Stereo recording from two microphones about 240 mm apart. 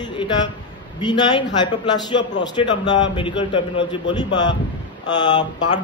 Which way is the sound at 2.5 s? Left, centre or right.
Centre.